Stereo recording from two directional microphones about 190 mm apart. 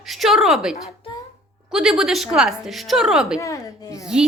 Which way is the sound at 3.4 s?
15° left (ahead or behind).